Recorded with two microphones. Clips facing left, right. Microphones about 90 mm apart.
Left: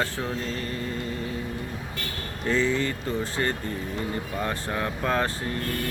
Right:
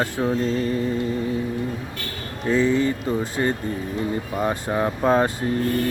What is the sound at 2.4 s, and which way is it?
Mantra, 10° right (ahead or behind).